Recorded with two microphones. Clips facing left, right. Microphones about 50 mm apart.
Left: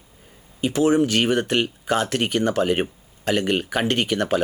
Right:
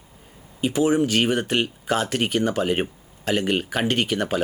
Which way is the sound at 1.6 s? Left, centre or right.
Centre.